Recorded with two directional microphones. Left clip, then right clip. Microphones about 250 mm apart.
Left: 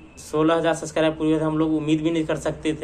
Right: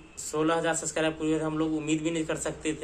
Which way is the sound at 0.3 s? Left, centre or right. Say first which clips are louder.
Left 7 dB; centre.